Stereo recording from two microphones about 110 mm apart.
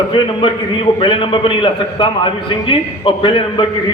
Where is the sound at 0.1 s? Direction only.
50° left (ahead or behind).